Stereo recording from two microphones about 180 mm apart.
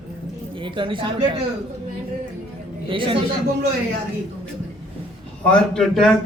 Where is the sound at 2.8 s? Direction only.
30° right (ahead or behind).